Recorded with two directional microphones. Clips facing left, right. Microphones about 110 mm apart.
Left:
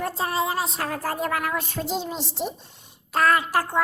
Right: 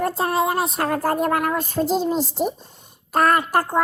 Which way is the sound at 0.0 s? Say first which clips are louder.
Right 5 dB; 55° right (ahead or behind).